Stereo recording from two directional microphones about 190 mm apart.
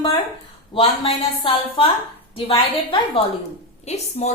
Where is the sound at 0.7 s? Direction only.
30° left (ahead or behind).